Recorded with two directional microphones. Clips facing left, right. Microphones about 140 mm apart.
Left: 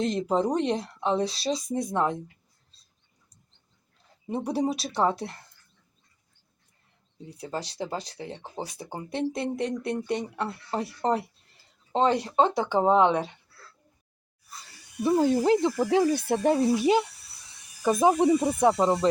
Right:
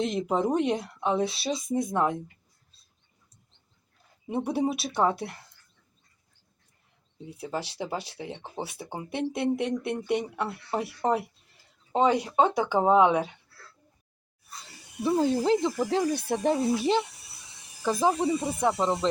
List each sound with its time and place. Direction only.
0.0 s speech: 5° right (ahead or behind)
4.3 s speech: 5° right (ahead or behind)
7.3 s speech: 5° right (ahead or behind)
15.0 s speech: 10° left (ahead or behind)
17.2 s a sound: 25° right (ahead or behind)
18.0 s speech: 15° left (ahead or behind)